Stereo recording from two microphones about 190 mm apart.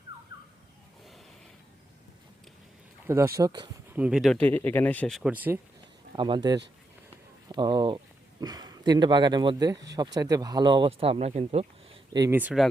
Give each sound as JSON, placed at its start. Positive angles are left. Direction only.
{"t": 3.1, "sound": "speech", "side_deg": -15}
{"t": 3.9, "sound": "speech", "side_deg": -5}
{"t": 6.1, "sound": "speech", "side_deg": -25}
{"t": 12.1, "sound": "speech", "side_deg": -20}
{"t": 12.4, "sound": "speech", "side_deg": -5}